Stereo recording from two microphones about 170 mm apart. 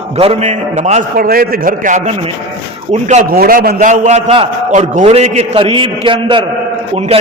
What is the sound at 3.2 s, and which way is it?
A man's voice, 60° right (ahead or behind).